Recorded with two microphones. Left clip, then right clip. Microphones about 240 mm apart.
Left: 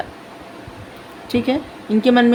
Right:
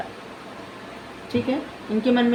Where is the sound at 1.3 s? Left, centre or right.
Left.